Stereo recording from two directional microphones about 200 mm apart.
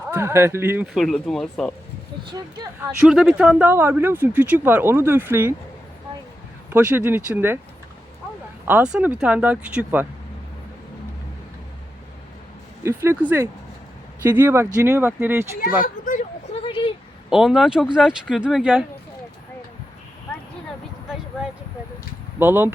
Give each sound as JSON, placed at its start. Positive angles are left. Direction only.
{"t": 0.1, "sound": "speech", "side_deg": -10}
{"t": 0.9, "sound": "speech", "side_deg": 0}
{"t": 3.0, "sound": "speech", "side_deg": -5}
{"t": 6.7, "sound": "speech", "side_deg": -10}
{"t": 8.6, "sound": "speech", "side_deg": -5}
{"t": 12.8, "sound": "speech", "side_deg": -15}
{"t": 15.8, "sound": "a sound", "side_deg": 40}
{"t": 16.6, "sound": "a sound", "side_deg": 25}
{"t": 17.2, "sound": "speech", "side_deg": -5}
{"t": 22.4, "sound": "speech", "side_deg": -10}